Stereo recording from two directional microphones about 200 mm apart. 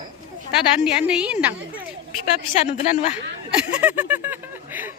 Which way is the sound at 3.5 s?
5° right (ahead or behind).